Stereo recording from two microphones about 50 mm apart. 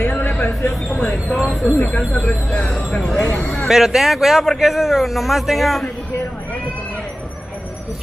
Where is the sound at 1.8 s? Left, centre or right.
Left.